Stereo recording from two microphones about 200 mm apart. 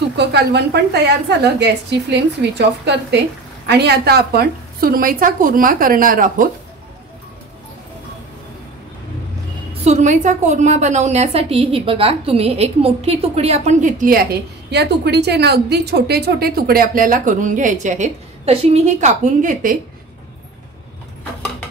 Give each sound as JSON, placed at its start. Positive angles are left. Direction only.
{"t": 0.2, "sound": "a woman's voice", "side_deg": -55}
{"t": 9.8, "sound": "a woman's voice", "side_deg": -35}
{"t": 14.7, "sound": "a woman's voice", "side_deg": -55}